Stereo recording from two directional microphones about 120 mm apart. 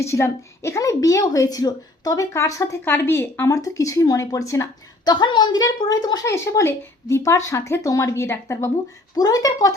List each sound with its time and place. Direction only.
0.0 s speech: 25° left (ahead or behind)
5.1 s a woman's voice: 40° left (ahead or behind)
6.3 s a woman's voice: 25° left (ahead or behind)